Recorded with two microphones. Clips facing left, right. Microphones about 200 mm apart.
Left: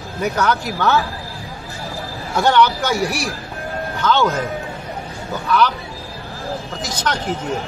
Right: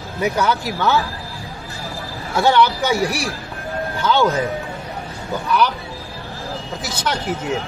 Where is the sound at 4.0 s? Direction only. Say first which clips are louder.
Right 1 dB; 15° right (ahead or behind).